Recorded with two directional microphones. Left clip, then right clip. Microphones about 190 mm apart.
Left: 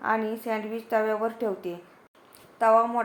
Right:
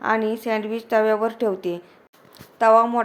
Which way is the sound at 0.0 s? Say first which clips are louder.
Right 5 dB; 35° right (ahead or behind).